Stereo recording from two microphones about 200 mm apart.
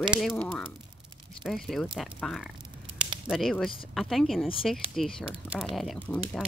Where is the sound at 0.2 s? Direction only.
5° left (ahead or behind).